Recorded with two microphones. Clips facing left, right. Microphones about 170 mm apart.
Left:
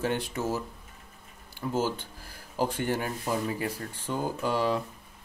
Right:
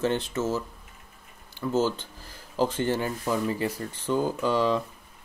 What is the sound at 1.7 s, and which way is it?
Speech, 10° left (ahead or behind).